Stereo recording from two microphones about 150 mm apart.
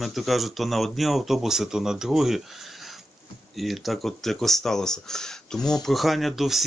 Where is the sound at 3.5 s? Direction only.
Centre (ahead or behind).